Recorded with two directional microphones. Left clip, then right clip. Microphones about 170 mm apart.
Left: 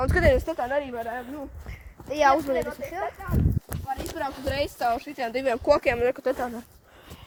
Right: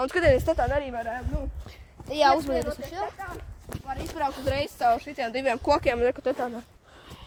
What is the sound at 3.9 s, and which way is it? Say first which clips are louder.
Speech: left 2 dB; 60° left (ahead or behind).